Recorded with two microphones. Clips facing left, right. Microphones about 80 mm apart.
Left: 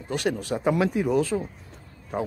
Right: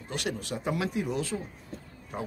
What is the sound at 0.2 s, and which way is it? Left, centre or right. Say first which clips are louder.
Speech: left 8 dB; left.